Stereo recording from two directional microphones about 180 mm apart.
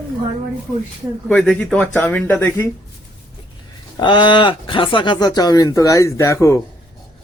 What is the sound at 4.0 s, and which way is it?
Speech, 25° left (ahead or behind).